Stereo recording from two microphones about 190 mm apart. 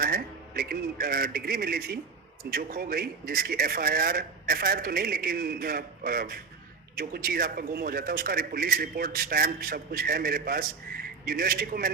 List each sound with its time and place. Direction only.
0.0 s speech: 50° right (ahead or behind)